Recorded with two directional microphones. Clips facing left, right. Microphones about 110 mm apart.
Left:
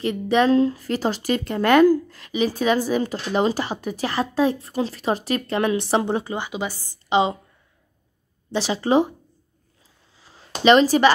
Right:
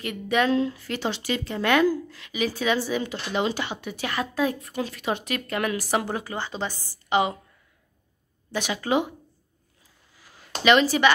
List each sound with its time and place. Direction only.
0.0 s speech: 30° left (ahead or behind)
6.4 s a woman's voice: 10° left (ahead or behind)
8.5 s speech: 30° left (ahead or behind)
10.1 s a sound: 25° left (ahead or behind)
10.6 s speech: 35° left (ahead or behind)